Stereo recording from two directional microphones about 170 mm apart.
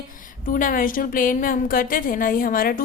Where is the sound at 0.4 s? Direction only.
55° left (ahead or behind).